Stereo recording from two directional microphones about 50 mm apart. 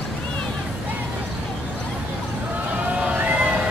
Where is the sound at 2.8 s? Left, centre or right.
Right.